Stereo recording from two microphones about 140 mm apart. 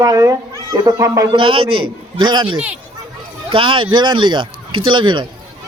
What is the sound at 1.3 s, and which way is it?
Speech, 40° right (ahead or behind).